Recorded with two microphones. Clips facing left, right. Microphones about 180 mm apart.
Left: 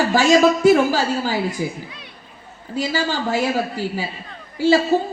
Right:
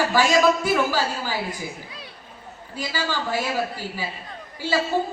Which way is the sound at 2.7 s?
45° left (ahead or behind).